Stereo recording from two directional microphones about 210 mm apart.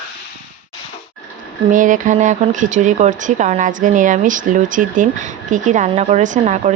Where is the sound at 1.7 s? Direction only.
35° right (ahead or behind).